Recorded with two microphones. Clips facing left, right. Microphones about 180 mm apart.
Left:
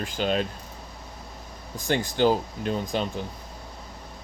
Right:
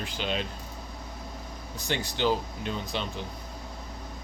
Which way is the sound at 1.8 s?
50° left (ahead or behind).